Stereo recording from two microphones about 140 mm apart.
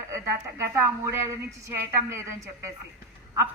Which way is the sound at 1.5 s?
20° right (ahead or behind).